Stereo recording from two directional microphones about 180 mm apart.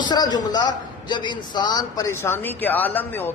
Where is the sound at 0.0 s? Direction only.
25° left (ahead or behind).